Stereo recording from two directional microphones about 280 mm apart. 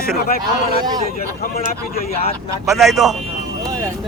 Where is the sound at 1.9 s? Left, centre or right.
Left.